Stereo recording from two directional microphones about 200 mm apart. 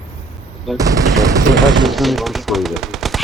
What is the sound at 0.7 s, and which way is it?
Machine gun, 15° right (ahead or behind).